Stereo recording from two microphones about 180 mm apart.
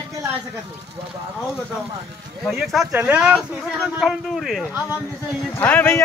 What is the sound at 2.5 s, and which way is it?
A man's voice, centre (ahead or behind).